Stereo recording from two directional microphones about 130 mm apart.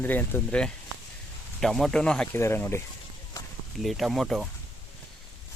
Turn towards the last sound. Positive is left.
turn(degrees=0)  # may be behind; listen again after turning